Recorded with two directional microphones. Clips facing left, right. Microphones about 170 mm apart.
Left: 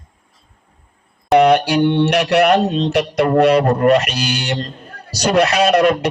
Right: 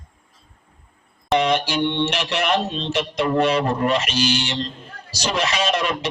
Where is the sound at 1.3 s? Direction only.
65° left (ahead or behind).